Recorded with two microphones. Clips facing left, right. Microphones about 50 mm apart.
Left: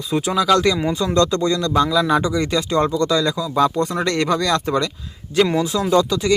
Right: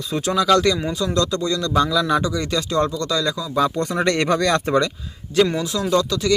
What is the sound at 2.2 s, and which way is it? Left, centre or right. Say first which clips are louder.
Speech: left 3 dB; left.